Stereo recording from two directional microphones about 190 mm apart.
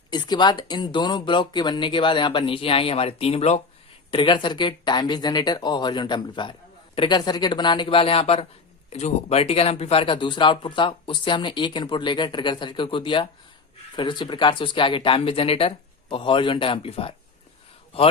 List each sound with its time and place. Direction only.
0.1 s speech: 25° left (ahead or behind)